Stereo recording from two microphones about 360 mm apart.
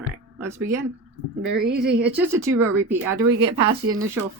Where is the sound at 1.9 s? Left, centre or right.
Right.